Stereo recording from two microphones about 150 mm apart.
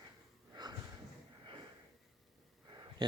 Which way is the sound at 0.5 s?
25° right (ahead or behind).